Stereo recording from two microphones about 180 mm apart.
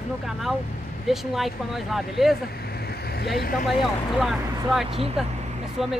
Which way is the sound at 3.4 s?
50° left (ahead or behind).